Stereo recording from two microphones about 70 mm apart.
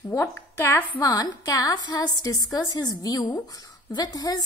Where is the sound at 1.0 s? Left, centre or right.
Left.